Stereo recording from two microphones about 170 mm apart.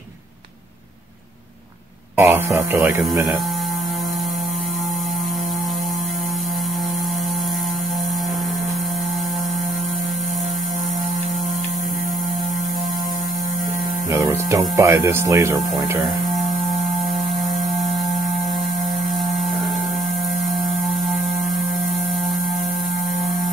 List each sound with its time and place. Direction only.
2.1 s speech: 15° right (ahead or behind)
14.2 s speech: 15° right (ahead or behind)